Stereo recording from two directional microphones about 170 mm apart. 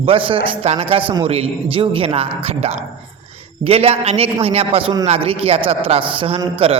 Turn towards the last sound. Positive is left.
turn(degrees=-35)  # may be behind; listen again after turning